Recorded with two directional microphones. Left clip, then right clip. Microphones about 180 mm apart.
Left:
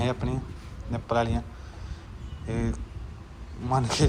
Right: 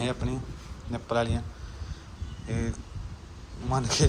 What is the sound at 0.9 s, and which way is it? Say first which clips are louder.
Speech: left 2 dB; 15° right (ahead or behind).